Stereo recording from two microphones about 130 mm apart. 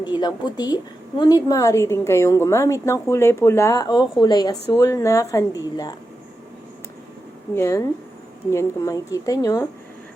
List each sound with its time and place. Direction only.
0.0 s a woman's voice: 35° left (ahead or behind)
7.5 s a woman's voice: 20° left (ahead or behind)